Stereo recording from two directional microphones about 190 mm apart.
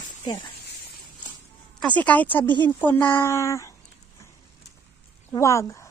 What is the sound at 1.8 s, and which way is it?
Speech, 5° left (ahead or behind).